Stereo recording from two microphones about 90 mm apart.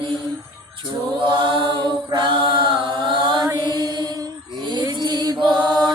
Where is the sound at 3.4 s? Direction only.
55° right (ahead or behind).